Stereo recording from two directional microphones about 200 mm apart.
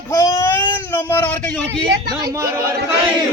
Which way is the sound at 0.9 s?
10° left (ahead or behind).